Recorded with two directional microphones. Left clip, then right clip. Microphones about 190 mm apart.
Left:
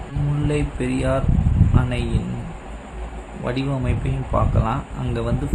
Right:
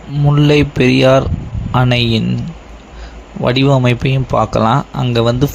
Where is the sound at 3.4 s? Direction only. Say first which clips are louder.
Right 13 dB; 50° right (ahead or behind).